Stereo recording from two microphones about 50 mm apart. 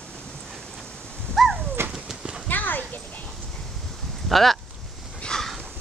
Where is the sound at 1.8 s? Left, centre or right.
Right.